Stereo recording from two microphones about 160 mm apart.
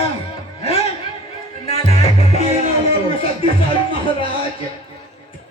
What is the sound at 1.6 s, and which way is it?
Music, 40° left (ahead or behind).